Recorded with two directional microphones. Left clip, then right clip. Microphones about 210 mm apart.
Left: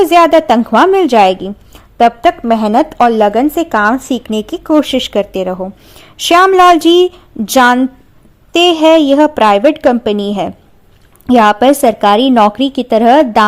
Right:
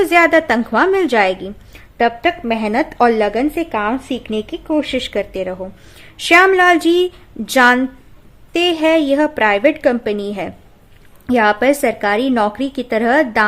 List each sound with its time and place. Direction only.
0.0 s a woman's voice: 20° left (ahead or behind)
4.3 s speech: 30° left (ahead or behind)